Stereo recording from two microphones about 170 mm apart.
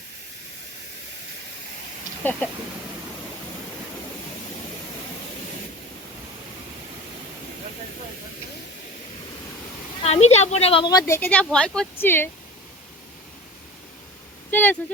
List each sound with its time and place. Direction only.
10.0 s speech: 40° left (ahead or behind); by 12.3 s 15° left (ahead or behind)
14.5 s speech: 10° left (ahead or behind)